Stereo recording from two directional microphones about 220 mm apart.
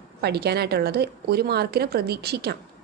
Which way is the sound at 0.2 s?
45° right (ahead or behind).